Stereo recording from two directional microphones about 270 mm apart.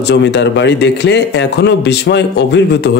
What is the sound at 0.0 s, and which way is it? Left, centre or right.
Speech, left.